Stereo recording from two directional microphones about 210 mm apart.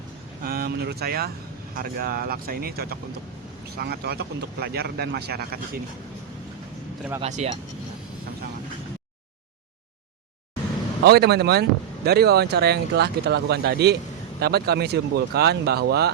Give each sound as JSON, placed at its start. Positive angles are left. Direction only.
{"t": 0.4, "sound": "speech", "side_deg": -45}
{"t": 7.2, "sound": "speech", "side_deg": -30}
{"t": 11.0, "sound": "speech", "side_deg": -50}